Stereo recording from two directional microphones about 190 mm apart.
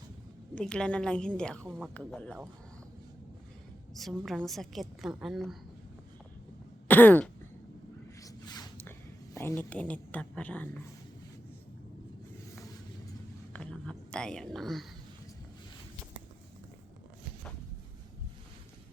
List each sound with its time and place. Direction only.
0.5 s a woman's voice: 5° left (ahead or behind)
3.9 s a woman's voice: centre (ahead or behind)
6.8 s throat clearing: 10° left (ahead or behind)
8.2 s a sound: 20° left (ahead or behind)
9.3 s speech: 15° left (ahead or behind)
13.5 s a woman's voice: 5° left (ahead or behind)